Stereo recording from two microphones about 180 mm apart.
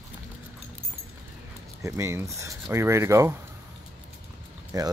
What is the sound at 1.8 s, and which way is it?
Speech, 15° right (ahead or behind).